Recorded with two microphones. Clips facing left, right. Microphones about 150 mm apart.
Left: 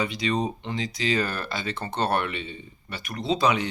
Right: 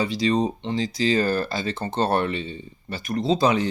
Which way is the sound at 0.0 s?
35° right (ahead or behind).